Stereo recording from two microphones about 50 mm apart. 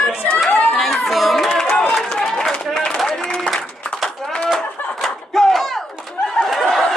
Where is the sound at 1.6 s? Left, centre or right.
Centre.